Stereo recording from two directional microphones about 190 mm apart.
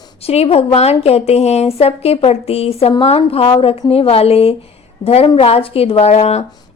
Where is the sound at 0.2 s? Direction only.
30° left (ahead or behind).